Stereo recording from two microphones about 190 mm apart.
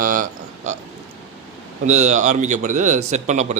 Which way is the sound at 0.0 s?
45° right (ahead or behind).